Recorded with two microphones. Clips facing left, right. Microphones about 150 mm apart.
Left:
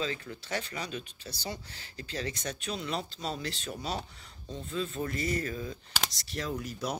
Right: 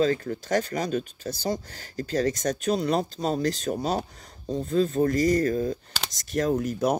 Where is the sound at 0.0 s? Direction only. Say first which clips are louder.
Right 12 dB; 45° right (ahead or behind).